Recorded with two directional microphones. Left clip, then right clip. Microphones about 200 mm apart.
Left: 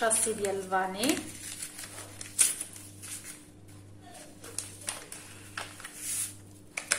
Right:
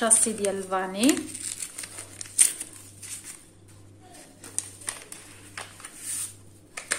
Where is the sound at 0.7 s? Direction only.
55° right (ahead or behind).